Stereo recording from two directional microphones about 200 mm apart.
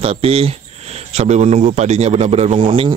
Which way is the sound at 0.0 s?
30° right (ahead or behind).